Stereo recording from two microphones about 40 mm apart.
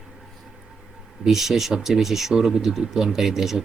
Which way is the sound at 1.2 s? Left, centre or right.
Centre.